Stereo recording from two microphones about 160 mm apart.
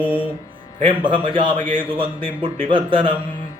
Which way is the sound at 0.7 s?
35° right (ahead or behind).